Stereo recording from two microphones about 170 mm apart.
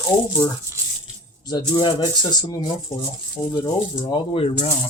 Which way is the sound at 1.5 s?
25° left (ahead or behind).